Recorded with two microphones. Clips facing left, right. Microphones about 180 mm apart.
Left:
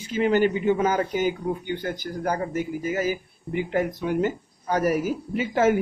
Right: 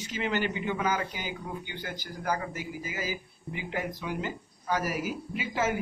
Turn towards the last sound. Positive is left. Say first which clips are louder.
# left 9 dB
turn(degrees=50)  # may be behind; listen again after turning